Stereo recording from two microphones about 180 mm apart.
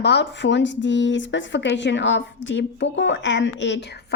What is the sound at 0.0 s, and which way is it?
A woman's voice, 75° left (ahead or behind).